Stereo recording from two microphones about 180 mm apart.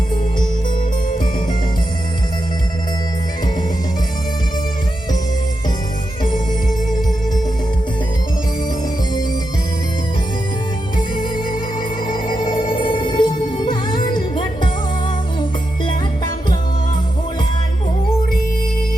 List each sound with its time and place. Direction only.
10.9 s music: 25° left (ahead or behind)
15.9 s music: 25° left (ahead or behind)